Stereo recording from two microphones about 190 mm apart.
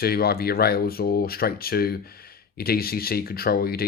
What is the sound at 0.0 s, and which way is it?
Speech, 55° left (ahead or behind).